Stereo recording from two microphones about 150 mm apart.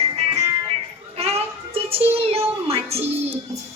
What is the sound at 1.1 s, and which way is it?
Child singing, 40° right (ahead or behind).